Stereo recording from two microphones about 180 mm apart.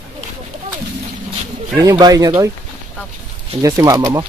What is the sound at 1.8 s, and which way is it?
Speech, 20° right (ahead or behind).